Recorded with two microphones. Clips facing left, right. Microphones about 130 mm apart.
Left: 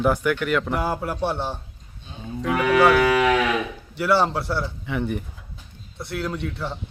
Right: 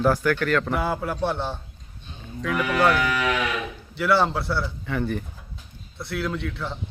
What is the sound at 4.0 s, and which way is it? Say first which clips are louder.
Speech: left 1 dB; 40° left (ahead or behind).